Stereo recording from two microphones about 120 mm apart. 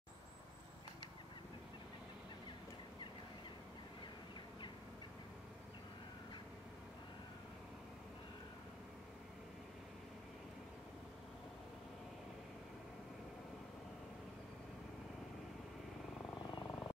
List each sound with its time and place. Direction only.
16.4 s vehicle: 30° left (ahead or behind)